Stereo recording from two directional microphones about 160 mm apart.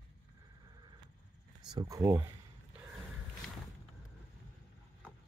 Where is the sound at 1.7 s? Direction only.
20° right (ahead or behind).